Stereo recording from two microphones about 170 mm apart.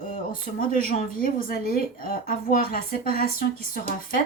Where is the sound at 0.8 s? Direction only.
55° left (ahead or behind).